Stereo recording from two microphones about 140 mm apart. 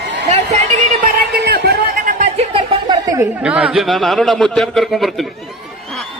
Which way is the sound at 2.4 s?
40° right (ahead or behind).